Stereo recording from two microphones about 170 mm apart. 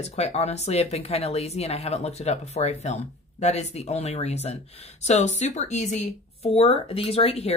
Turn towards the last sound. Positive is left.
turn(degrees=35)  # may be behind; listen again after turning